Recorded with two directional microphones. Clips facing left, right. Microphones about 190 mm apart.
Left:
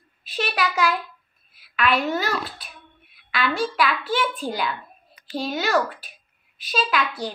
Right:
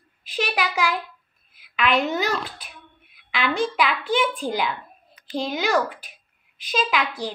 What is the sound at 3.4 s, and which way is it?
A child's voice, 15° right (ahead or behind).